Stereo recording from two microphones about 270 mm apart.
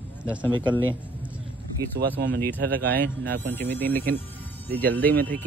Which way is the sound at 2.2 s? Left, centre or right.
Right.